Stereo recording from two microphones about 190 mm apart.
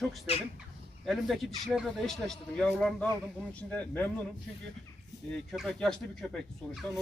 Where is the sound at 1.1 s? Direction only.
Centre (ahead or behind).